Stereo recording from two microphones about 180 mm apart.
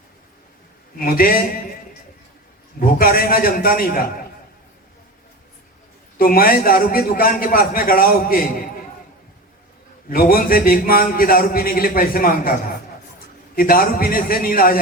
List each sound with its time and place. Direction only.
0.9 s a man's voice: 55° left (ahead or behind)
2.8 s a man's voice: 55° left (ahead or behind)
6.1 s a man's voice: 50° left (ahead or behind)
10.1 s a man's voice: 55° left (ahead or behind)
13.6 s a man's voice: 55° left (ahead or behind)